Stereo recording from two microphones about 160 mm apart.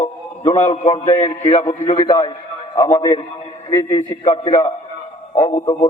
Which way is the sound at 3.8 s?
35° left (ahead or behind).